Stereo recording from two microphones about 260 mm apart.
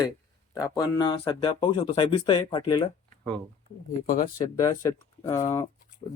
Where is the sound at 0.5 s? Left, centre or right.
Centre.